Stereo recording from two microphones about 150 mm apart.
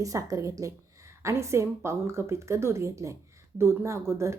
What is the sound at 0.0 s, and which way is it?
A woman's voice, 20° right (ahead or behind).